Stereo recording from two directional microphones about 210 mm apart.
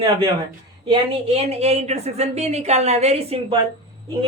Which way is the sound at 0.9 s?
25° right (ahead or behind).